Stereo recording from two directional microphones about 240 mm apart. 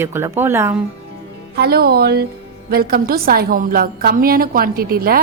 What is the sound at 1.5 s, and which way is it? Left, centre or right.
A woman's voice, right.